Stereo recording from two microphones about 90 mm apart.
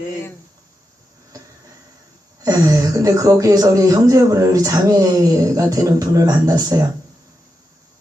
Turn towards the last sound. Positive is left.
turn(degrees=-40)  # may be behind; listen again after turning